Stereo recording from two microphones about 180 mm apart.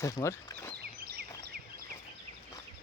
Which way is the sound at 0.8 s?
60° right (ahead or behind).